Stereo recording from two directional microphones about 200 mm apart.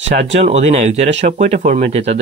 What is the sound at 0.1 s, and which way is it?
Speech, 35° right (ahead or behind).